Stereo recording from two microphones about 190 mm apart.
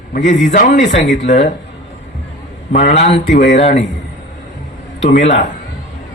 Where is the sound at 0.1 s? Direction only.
40° left (ahead or behind).